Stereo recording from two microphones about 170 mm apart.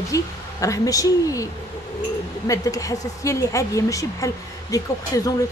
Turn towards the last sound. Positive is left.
turn(degrees=20)  # may be behind; listen again after turning